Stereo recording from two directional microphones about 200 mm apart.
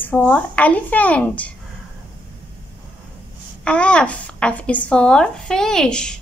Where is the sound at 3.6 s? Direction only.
5° left (ahead or behind).